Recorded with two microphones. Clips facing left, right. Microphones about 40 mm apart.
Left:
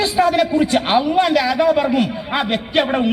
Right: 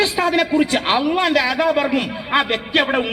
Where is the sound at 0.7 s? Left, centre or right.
Centre.